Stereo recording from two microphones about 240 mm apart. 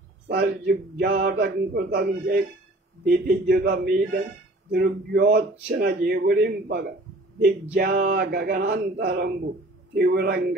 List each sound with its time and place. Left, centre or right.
0.3 s a man's voice: right